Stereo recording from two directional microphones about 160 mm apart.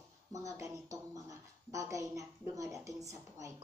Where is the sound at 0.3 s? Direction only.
20° right (ahead or behind).